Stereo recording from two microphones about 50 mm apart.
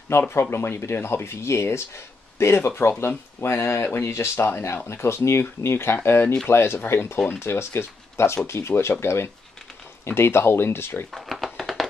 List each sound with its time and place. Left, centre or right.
0.3 s speech: left
3.4 s speech: left
4.5 s speech: left
4.8 s speech: left
11.1 s a sound: centre